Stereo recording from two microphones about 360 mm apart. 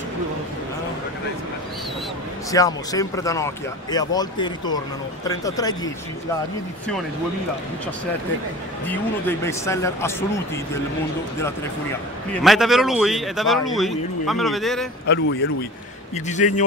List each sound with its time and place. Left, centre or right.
2.5 s speech: centre
8.8 s speech: centre
12.3 s speech: centre
15.0 s speech: left
16.3 s speech: centre